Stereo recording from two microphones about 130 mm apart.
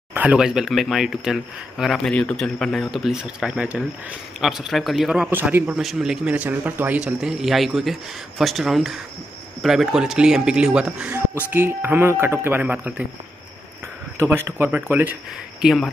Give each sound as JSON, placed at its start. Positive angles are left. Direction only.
{"t": 0.1, "sound": "a man's voice", "side_deg": -10}
{"t": 5.8, "sound": "a man's voice", "side_deg": -5}
{"t": 14.1, "sound": "speech", "side_deg": -20}
{"t": 15.6, "sound": "a man's voice", "side_deg": 0}